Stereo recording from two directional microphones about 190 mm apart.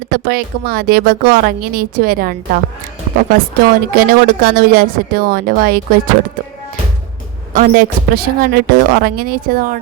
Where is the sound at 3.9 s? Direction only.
50° right (ahead or behind).